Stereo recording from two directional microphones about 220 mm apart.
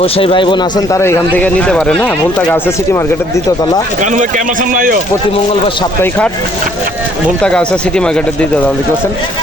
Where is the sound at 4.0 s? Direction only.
35° right (ahead or behind).